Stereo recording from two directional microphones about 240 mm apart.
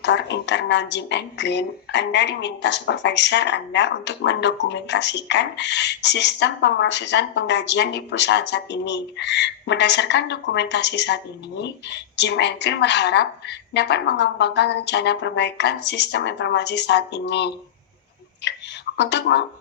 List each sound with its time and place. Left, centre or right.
0.0 s a woman's voice: left